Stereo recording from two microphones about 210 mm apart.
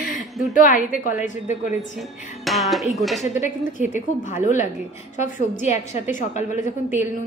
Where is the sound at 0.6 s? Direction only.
40° left (ahead or behind).